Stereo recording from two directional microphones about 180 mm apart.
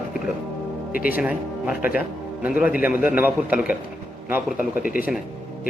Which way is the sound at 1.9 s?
5° right (ahead or behind).